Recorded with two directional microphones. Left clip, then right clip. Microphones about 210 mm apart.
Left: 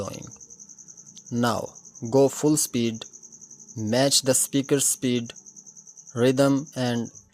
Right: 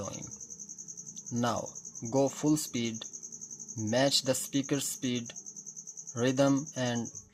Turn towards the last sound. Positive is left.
turn(degrees=30)  # may be behind; listen again after turning